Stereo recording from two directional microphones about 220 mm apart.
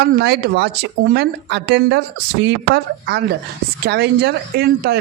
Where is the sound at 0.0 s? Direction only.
45° right (ahead or behind).